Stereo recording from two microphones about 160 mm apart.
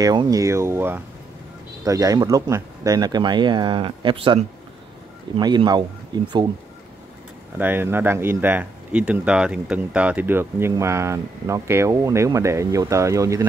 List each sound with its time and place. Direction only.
0.0 s speech: 25° right (ahead or behind)
7.5 s speech: 10° right (ahead or behind)